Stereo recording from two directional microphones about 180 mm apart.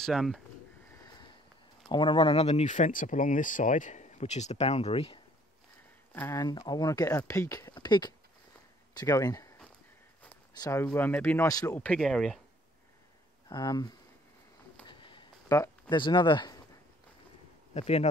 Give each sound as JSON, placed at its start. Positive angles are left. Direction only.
{"t": 0.0, "sound": "speech", "side_deg": 0}
{"t": 0.9, "sound": "sniff", "side_deg": 20}
{"t": 1.9, "sound": "speech", "side_deg": 25}
{"t": 6.1, "sound": "speech", "side_deg": 15}
{"t": 10.6, "sound": "speech", "side_deg": 15}
{"t": 13.5, "sound": "speech", "side_deg": 20}
{"t": 14.9, "sound": "a sound", "side_deg": 25}
{"t": 16.0, "sound": "speech", "side_deg": 25}
{"t": 17.7, "sound": "speech", "side_deg": 35}